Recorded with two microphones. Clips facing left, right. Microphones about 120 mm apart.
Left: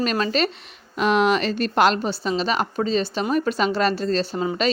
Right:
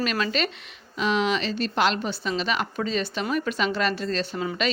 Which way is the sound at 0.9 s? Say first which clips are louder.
Left 5 dB; 55° left (ahead or behind).